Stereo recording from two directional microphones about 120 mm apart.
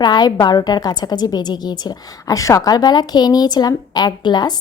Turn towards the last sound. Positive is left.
turn(degrees=35)  # may be behind; listen again after turning